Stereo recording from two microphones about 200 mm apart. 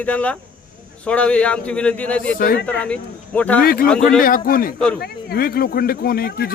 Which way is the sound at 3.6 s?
45° left (ahead or behind).